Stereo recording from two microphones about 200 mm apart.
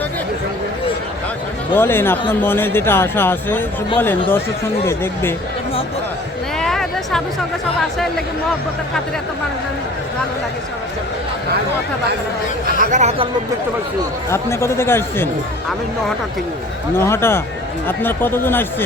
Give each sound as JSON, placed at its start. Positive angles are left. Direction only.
{"t": 1.7, "sound": "speech", "side_deg": 10}
{"t": 6.6, "sound": "a sound", "side_deg": 0}
{"t": 12.8, "sound": "speech", "side_deg": -35}
{"t": 14.3, "sound": "speech", "side_deg": 15}
{"t": 16.9, "sound": "speech", "side_deg": 10}